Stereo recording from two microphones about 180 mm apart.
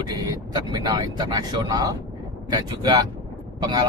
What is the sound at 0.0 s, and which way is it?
Speech, 25° right (ahead or behind).